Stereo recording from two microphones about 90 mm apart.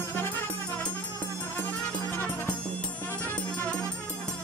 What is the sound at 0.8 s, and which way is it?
Music, 15° left (ahead or behind).